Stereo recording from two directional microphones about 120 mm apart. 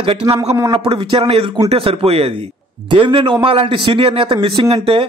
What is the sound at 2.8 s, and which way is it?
A man's voice, 45° right (ahead or behind).